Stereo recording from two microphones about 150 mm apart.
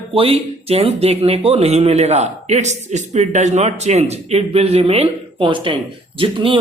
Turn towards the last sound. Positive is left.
turn(degrees=-35)  # may be behind; listen again after turning